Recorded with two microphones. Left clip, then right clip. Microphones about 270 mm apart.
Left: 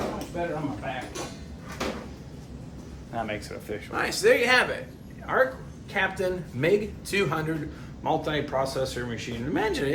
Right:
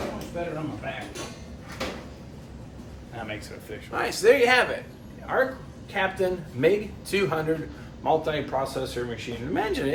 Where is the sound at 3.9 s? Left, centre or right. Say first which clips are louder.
Right 2 dB; centre.